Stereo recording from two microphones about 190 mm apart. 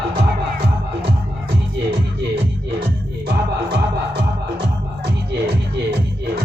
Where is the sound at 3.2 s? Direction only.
60° right (ahead or behind).